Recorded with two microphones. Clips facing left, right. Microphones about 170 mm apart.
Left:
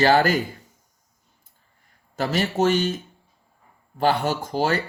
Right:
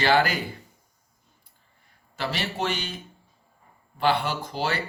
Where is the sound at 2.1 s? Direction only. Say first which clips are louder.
Left 7 dB; 45° left (ahead or behind).